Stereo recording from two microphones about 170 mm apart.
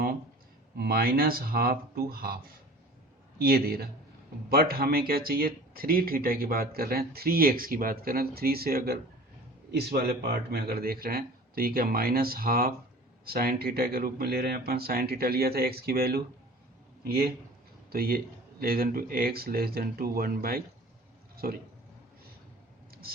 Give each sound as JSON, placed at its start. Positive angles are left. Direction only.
{"t": 0.8, "sound": "a man's voice", "side_deg": -60}